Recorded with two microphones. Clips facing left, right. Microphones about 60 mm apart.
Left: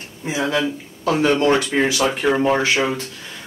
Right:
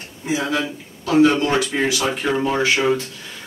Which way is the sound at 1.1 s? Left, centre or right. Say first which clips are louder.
Right 1 dB; left.